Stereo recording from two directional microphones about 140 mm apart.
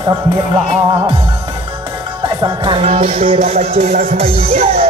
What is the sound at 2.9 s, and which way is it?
Music, 55° right (ahead or behind).